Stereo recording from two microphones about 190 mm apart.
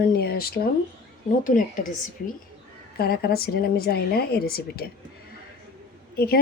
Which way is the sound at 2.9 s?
55° left (ahead or behind).